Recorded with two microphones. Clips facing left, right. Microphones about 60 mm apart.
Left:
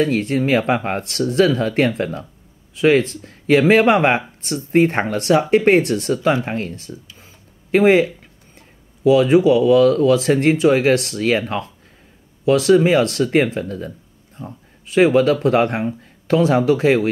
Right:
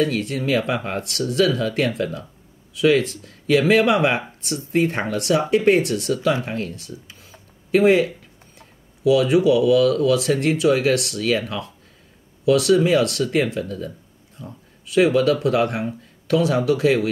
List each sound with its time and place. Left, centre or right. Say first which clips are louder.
0.0 s speech: left 4 dB; left